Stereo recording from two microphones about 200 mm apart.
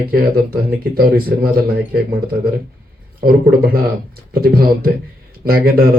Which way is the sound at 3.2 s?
50° right (ahead or behind).